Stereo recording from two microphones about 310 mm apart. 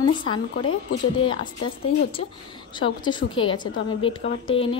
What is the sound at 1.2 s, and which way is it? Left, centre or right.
Speech, centre.